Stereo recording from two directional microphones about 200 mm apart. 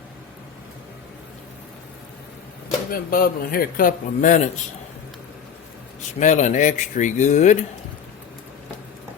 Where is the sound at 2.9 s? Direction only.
45° left (ahead or behind).